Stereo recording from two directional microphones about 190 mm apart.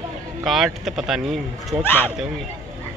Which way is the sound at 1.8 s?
10° left (ahead or behind).